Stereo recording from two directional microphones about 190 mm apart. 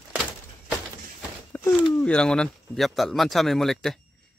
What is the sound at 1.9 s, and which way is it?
Speech, 5° left (ahead or behind).